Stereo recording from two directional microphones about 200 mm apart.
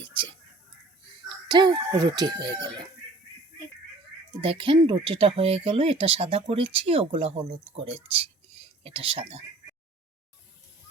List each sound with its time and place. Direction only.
1.5 s speech: 20° right (ahead or behind)
4.4 s speech: 25° right (ahead or behind)